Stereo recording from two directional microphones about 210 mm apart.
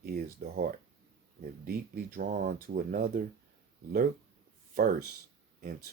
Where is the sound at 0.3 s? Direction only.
40° right (ahead or behind).